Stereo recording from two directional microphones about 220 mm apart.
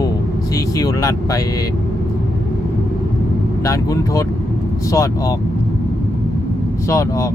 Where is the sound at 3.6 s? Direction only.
15° left (ahead or behind).